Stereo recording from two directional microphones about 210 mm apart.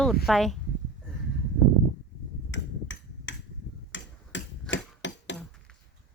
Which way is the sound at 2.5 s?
60° left (ahead or behind).